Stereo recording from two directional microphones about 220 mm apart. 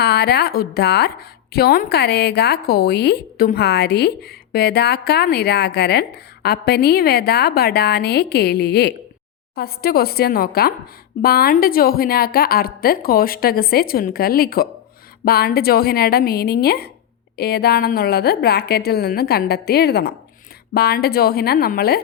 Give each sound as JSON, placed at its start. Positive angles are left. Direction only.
{"t": 0.0, "sound": "a woman's voice", "side_deg": 45}